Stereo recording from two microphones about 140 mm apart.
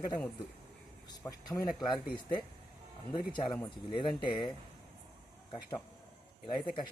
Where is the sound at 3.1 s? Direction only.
35° left (ahead or behind).